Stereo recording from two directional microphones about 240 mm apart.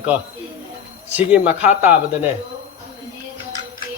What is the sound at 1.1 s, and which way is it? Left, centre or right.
A man's voice, centre.